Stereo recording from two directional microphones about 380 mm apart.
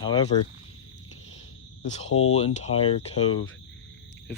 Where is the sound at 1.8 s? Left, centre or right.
Centre.